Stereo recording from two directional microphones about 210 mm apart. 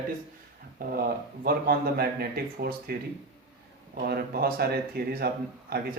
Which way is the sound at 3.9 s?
50° right (ahead or behind).